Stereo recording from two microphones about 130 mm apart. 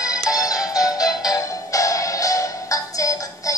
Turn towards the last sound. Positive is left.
turn(degrees=25)  # may be behind; listen again after turning